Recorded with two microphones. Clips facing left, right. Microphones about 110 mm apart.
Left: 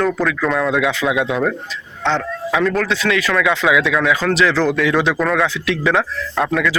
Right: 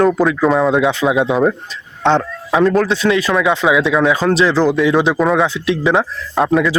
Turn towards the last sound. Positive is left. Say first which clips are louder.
# right 4 dB
turn(degrees=-30)  # may be behind; listen again after turning